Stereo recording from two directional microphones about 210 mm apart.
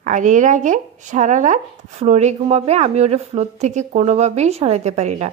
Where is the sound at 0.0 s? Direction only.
35° right (ahead or behind).